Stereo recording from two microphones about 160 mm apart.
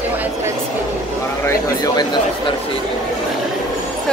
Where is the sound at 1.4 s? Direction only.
25° left (ahead or behind).